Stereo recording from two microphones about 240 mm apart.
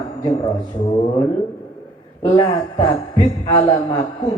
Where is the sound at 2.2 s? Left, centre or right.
Left.